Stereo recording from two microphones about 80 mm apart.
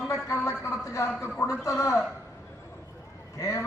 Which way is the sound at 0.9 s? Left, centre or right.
Left.